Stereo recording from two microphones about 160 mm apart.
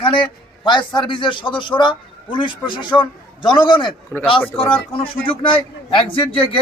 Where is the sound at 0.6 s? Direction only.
30° left (ahead or behind).